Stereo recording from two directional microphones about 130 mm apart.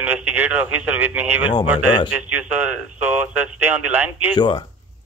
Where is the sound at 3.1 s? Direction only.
15° right (ahead or behind).